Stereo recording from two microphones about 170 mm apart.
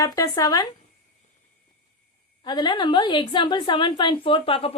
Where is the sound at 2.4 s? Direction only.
25° left (ahead or behind).